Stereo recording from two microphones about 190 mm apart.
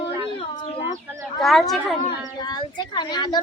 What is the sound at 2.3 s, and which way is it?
Speech, 20° left (ahead or behind).